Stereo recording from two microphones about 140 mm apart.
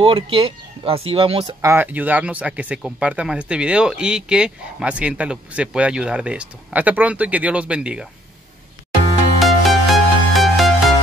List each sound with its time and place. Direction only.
0.0 s speech: 40° right (ahead or behind)
1.6 s speech: 15° right (ahead or behind)
9.4 s music: centre (ahead or behind)